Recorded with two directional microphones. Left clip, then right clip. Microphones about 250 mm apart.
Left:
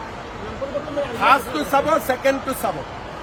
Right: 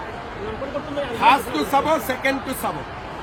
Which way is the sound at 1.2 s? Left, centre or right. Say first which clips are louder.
Even; centre.